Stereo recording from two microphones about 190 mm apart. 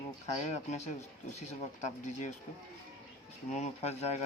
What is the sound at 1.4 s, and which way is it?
Speech, 40° left (ahead or behind).